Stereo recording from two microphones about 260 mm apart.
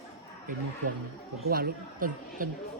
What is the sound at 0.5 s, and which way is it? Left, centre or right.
Speech, right.